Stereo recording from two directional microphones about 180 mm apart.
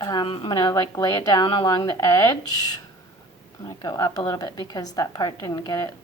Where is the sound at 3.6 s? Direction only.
20° left (ahead or behind).